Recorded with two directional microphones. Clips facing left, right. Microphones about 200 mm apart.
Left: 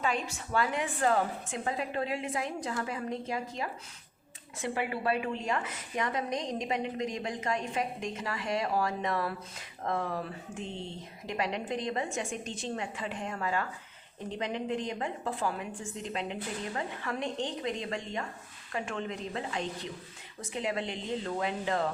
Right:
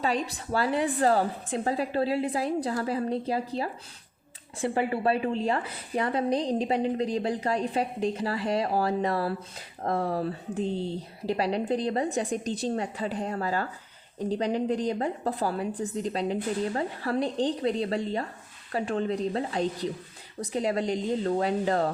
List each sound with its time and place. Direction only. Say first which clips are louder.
0.0 s a woman's voice: right 4 dB; 35° right (ahead or behind)